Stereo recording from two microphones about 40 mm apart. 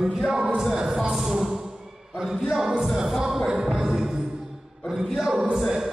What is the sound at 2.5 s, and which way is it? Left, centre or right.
Speech, centre.